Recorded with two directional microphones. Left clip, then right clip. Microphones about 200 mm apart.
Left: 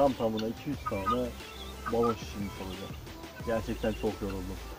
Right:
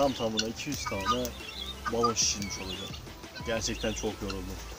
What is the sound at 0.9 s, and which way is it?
Speech, 45° right (ahead or behind).